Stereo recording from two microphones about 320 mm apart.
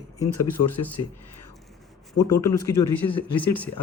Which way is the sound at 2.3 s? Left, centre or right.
Left.